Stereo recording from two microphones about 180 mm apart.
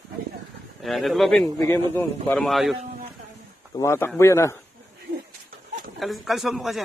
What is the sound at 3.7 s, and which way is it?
Speech, 15° left (ahead or behind).